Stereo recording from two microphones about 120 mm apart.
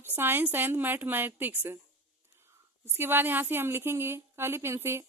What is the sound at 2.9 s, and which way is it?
A woman's voice, 20° right (ahead or behind).